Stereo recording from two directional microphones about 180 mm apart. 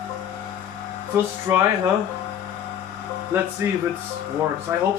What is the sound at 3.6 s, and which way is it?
Speech, 15° right (ahead or behind).